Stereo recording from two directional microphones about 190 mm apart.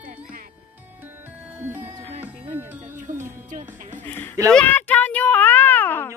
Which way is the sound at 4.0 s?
10° left (ahead or behind).